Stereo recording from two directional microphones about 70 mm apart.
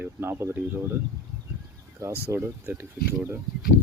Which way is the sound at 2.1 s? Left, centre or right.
Right.